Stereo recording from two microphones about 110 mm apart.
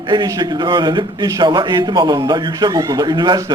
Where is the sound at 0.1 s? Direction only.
40° right (ahead or behind).